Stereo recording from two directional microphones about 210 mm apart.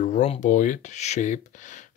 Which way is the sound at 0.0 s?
35° left (ahead or behind).